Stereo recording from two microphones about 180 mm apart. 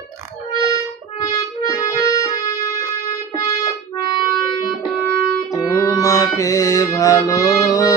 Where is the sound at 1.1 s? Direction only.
20° left (ahead or behind).